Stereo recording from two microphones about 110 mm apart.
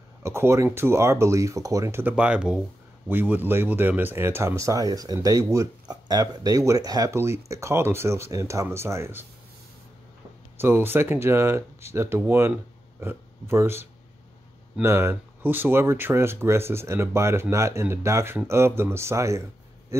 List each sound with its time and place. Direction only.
0.2 s speech: 25° right (ahead or behind)
10.6 s speech: 20° right (ahead or behind)